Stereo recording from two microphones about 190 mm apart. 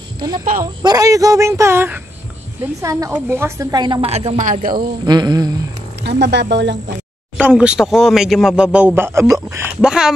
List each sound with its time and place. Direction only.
0.8 s a woman's voice: 20° right (ahead or behind); by 4.6 s 35° right (ahead or behind)
4.7 s a woman's voice: 20° right (ahead or behind)
6.0 s speech: 65° right (ahead or behind)
7.3 s speech: 5° right (ahead or behind)
9.8 s speech: 5° right (ahead or behind)